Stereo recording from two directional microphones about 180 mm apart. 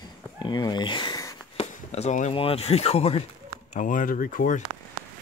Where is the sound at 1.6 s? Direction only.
35° left (ahead or behind).